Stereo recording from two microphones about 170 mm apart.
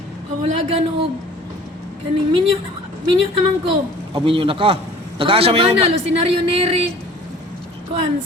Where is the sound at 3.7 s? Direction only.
30° right (ahead or behind).